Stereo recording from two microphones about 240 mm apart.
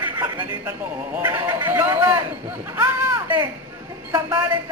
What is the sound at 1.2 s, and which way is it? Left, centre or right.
Speech, centre.